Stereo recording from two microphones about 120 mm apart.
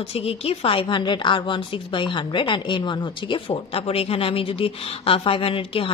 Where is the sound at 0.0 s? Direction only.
55° left (ahead or behind).